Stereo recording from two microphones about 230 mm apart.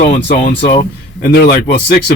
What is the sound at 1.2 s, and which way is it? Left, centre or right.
Speech, left.